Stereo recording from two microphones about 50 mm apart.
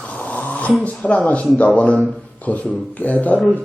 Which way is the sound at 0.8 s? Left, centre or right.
Left.